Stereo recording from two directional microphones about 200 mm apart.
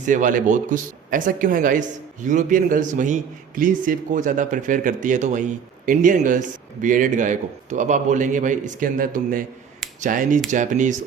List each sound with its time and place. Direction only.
0.0 s speech: 40° right (ahead or behind)